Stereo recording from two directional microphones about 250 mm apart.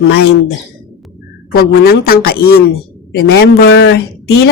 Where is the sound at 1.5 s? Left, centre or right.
Left.